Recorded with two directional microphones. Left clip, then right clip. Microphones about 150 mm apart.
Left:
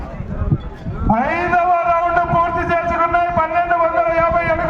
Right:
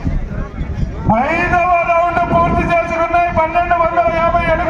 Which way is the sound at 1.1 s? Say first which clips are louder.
Right 2 dB; 70° right (ahead or behind).